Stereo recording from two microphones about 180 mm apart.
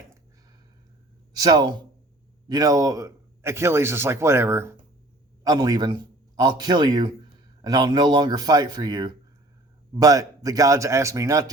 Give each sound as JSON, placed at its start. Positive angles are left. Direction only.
{"t": 1.4, "sound": "a man's voice", "side_deg": -20}